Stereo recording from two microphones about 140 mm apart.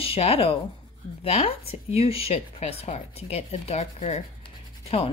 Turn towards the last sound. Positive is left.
turn(degrees=45)  # may be behind; listen again after turning